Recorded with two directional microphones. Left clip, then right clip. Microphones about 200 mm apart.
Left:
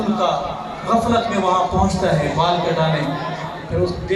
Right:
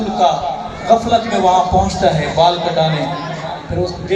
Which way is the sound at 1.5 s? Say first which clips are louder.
Right 8 dB; 45° right (ahead or behind).